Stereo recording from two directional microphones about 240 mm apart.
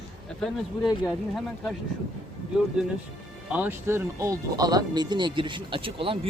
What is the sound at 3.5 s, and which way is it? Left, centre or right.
Speech, centre.